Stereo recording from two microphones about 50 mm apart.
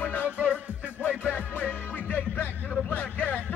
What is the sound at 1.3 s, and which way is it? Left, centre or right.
Music, left.